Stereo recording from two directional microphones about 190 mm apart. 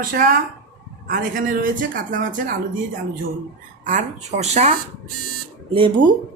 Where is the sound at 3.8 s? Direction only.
40° right (ahead or behind).